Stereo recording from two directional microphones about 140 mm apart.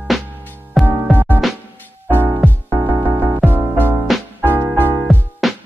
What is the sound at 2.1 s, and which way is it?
Music, 15° right (ahead or behind).